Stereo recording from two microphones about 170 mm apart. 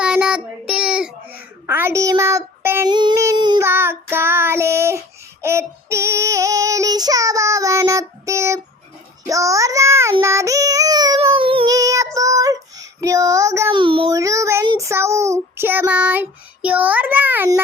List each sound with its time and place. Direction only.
0.0 s child singing: 5° right (ahead or behind)
2.9 s child singing: 25° right (ahead or behind)
3.6 s child singing: 15° right (ahead or behind); by 11.7 s 30° right (ahead or behind)
11.7 s child singing: 20° right (ahead or behind)
13.7 s child singing: 30° right (ahead or behind)
14.1 s child singing: 20° right (ahead or behind)